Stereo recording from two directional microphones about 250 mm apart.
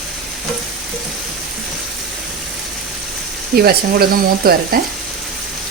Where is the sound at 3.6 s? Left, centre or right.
Right.